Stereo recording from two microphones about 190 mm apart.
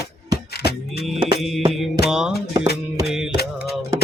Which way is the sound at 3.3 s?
55° left (ahead or behind).